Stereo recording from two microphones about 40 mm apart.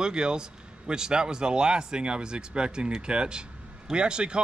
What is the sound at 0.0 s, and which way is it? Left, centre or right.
Speech, centre.